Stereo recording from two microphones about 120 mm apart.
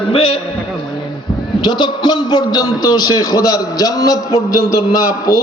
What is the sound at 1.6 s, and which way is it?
A man's voice, 40° left (ahead or behind).